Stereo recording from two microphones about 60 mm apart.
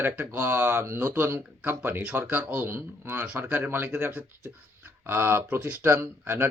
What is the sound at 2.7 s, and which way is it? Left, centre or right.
Speech, right.